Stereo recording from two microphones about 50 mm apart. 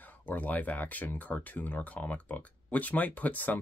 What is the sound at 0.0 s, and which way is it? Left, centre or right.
Speech, left.